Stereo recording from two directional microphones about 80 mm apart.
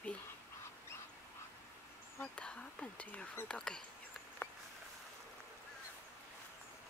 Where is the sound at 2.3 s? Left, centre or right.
Centre.